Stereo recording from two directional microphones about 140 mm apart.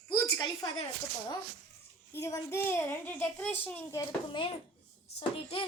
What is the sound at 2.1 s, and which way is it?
A child's voice, 20° left (ahead or behind).